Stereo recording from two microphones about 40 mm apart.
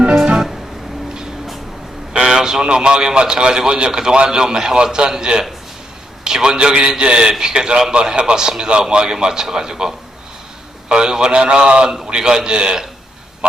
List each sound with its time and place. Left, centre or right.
2.1 s a man's voice: right